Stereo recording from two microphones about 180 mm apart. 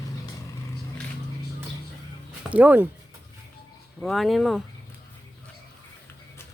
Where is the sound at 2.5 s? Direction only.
10° right (ahead or behind).